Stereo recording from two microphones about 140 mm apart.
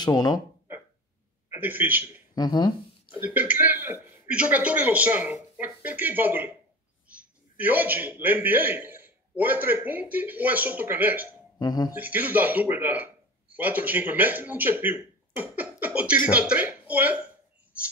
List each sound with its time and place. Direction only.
0.0 s speech: 30° left (ahead or behind)
1.5 s a man's voice: 15° right (ahead or behind)
2.3 s speech: 30° left (ahead or behind)
3.2 s a man's voice: 10° right (ahead or behind)
11.5 s speech: 30° left (ahead or behind)
11.9 s a man's voice: 10° right (ahead or behind)